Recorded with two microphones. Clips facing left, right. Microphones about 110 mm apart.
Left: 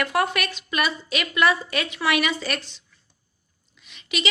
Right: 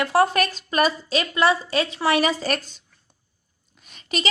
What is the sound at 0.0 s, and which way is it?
A woman's voice, 30° right (ahead or behind).